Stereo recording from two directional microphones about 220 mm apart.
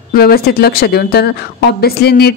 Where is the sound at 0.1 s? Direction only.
45° left (ahead or behind).